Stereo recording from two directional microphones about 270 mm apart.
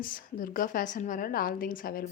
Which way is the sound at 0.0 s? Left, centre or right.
Left.